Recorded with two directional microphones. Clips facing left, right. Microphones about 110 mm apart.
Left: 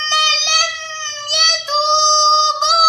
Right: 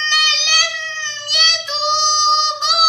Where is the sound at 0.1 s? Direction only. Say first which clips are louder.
Left 5 dB; 30° left (ahead or behind).